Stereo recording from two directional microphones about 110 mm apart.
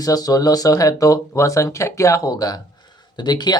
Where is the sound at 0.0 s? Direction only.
35° left (ahead or behind).